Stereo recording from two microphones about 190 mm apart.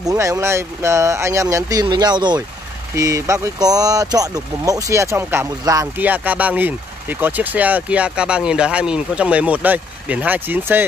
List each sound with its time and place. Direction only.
0.0 s speech: 15° right (ahead or behind)